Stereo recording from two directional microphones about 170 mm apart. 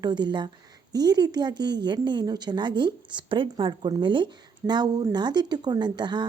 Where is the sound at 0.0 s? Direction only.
25° right (ahead or behind).